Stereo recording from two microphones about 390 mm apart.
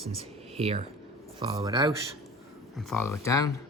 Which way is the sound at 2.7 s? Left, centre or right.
Centre.